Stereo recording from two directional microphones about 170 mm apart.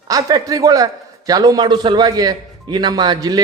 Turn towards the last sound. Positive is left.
turn(degrees=-25)  # may be behind; listen again after turning